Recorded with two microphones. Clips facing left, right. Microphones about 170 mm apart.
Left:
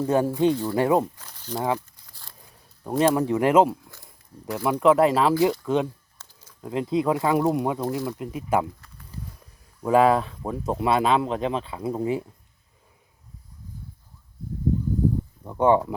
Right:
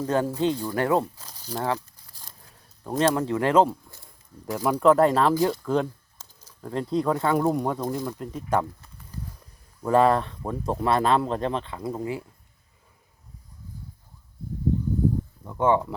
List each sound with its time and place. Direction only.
0.0 s speech: 10° left (ahead or behind)
1.2 s speech: 10° right (ahead or behind)
1.5 s speech: 10° left (ahead or behind)
2.8 s speech: 10° left (ahead or behind)
9.8 s speech: 5° left (ahead or behind)
15.4 s a sound: 15° left (ahead or behind)